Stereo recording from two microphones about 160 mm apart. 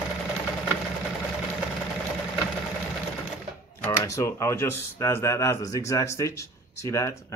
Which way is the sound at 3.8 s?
20° left (ahead or behind).